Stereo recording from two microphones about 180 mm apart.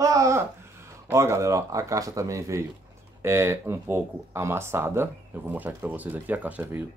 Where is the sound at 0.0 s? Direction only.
20° right (ahead or behind).